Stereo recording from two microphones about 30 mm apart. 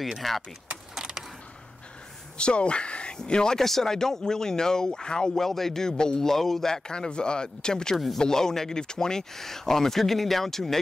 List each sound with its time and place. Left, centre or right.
0.2 s speech: centre
2.3 s a sound: left
3.2 s speech: left
3.5 s speech: centre; by 5.3 s left
5.3 s speech: centre
5.9 s speech: left
6.2 s speech: centre
6.7 s speech: left; by 10.8 s centre